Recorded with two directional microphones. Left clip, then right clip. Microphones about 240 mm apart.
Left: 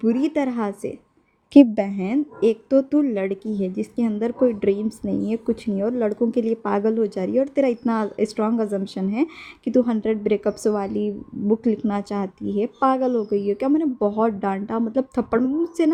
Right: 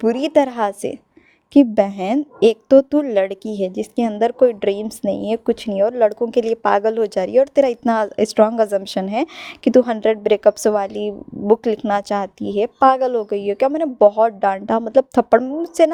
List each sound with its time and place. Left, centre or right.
0.0 s a woman's voice: right
1.5 s a woman's voice: centre
1.9 s a woman's voice: right